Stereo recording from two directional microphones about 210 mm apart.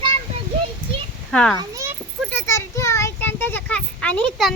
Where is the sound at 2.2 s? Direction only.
10° left (ahead or behind).